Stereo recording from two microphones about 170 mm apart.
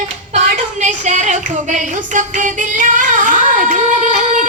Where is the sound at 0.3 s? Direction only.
45° right (ahead or behind).